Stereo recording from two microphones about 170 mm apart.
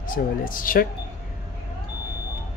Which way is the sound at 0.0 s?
55° left (ahead or behind).